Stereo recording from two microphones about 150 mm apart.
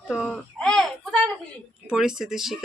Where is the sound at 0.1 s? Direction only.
5° left (ahead or behind).